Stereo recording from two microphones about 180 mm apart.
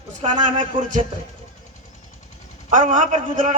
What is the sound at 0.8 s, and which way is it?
Speech, 45° right (ahead or behind).